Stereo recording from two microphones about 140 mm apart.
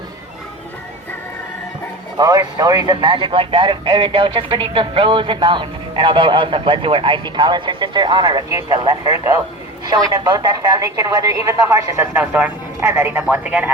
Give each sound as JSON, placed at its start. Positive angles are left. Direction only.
{"t": 2.1, "sound": "speech", "side_deg": -25}